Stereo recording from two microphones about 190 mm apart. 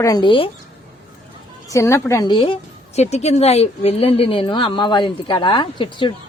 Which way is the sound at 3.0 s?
35° left (ahead or behind).